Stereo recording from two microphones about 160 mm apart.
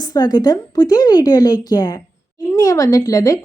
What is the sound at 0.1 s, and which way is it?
A woman's voice, 25° left (ahead or behind).